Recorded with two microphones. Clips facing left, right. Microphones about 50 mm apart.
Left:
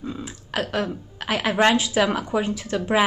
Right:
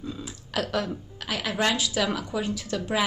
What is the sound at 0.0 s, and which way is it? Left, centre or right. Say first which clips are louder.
Burping: left 4 dB; left.